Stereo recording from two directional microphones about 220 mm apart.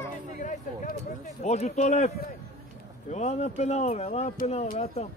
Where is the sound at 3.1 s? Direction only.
30° left (ahead or behind).